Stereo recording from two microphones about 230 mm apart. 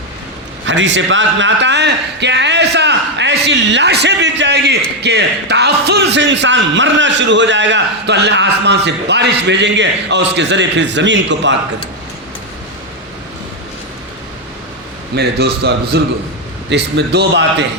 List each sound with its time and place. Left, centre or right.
0.6 s a man's voice: right
15.1 s a man's voice: right